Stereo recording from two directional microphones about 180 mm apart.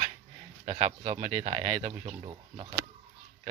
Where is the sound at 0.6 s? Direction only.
40° right (ahead or behind).